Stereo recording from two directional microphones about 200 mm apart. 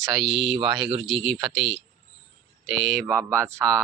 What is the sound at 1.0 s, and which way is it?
Speech, centre (ahead or behind).